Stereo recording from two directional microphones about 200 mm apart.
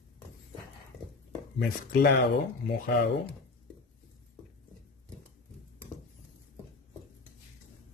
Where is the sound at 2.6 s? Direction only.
50° left (ahead or behind).